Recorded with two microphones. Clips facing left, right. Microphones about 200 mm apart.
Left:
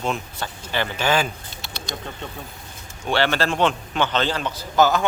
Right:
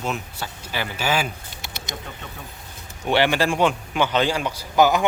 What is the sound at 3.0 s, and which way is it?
A man's voice, 15° right (ahead or behind).